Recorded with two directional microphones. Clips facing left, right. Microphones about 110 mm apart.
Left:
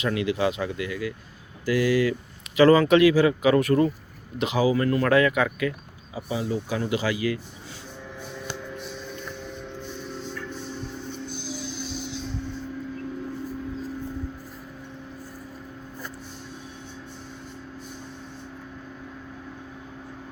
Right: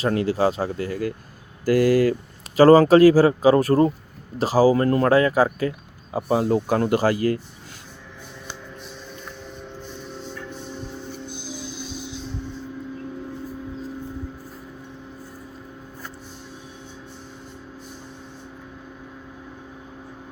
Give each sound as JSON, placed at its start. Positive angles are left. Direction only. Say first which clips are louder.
{"t": 0.0, "sound": "speech", "louder": "right 4 dB", "side_deg": -40}
{"t": 6.1, "sound": "speech", "louder": "right 8 dB", "side_deg": -55}